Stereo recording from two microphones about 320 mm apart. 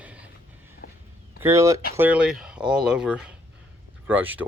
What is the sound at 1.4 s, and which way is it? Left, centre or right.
Speech, centre.